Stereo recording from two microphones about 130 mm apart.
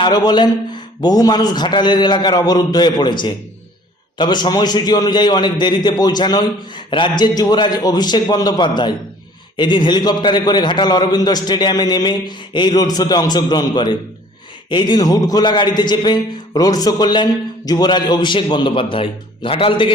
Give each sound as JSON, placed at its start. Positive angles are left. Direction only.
{"t": 0.0, "sound": "a man's voice", "side_deg": 35}